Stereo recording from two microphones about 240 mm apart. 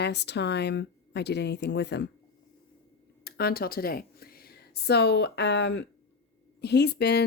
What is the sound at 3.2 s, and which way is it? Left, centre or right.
A woman's voice, left.